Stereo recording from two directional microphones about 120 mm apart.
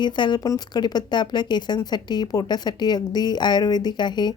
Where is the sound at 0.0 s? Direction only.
40° left (ahead or behind).